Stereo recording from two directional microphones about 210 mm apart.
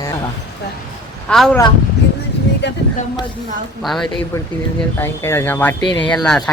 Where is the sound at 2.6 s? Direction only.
55° left (ahead or behind).